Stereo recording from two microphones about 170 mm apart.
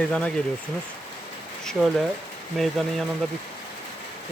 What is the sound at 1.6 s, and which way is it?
Speech, centre (ahead or behind).